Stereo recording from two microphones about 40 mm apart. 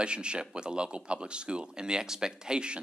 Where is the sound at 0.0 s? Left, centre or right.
Right.